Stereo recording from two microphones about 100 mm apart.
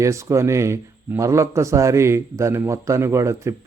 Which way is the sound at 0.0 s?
30° right (ahead or behind).